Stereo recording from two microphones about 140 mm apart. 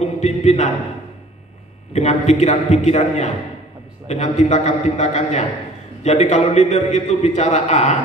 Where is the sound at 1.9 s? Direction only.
50° left (ahead or behind).